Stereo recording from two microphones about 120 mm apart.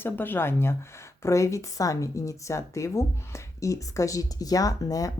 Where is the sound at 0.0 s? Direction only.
15° left (ahead or behind).